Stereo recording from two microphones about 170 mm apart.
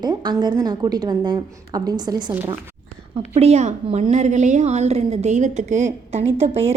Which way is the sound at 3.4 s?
40° right (ahead or behind).